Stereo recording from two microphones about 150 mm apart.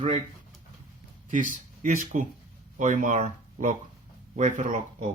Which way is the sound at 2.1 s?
55° right (ahead or behind).